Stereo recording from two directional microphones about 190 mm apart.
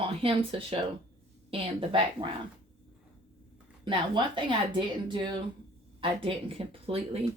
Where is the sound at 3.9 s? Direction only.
25° right (ahead or behind).